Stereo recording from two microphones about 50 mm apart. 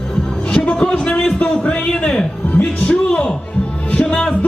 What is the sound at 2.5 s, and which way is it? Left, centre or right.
Music, left.